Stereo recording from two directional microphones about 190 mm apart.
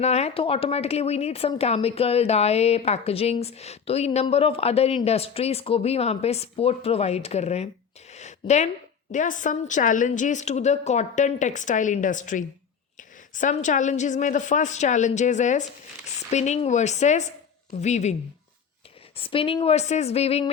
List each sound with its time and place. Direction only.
0.0 s speech: 35° left (ahead or behind)
8.1 s a sound: 35° left (ahead or behind)
9.1 s speech: 40° left (ahead or behind)
19.1 s speech: 30° left (ahead or behind)